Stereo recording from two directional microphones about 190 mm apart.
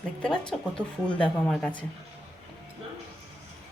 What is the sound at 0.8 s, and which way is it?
Speech, 5° left (ahead or behind).